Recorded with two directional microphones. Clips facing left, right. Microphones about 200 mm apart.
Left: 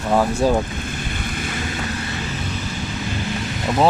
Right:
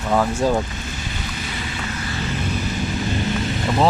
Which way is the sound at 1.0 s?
55° left (ahead or behind).